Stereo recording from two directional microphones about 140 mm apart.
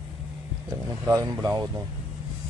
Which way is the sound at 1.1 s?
20° right (ahead or behind).